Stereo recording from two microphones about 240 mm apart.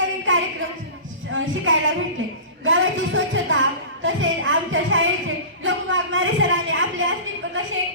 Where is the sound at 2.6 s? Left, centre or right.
Right.